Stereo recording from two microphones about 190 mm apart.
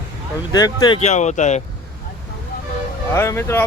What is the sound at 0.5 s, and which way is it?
Speech, 20° left (ahead or behind).